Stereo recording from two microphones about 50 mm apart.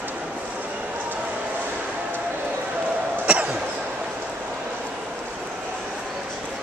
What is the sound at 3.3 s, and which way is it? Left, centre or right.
Cough, right.